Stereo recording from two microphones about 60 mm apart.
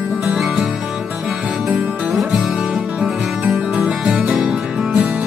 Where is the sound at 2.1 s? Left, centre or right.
Centre.